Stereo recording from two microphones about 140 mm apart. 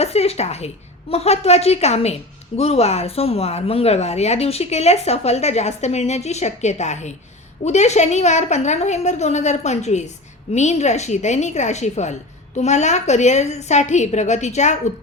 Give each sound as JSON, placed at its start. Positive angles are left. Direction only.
{"t": 0.0, "sound": "a woman's voice", "side_deg": 45}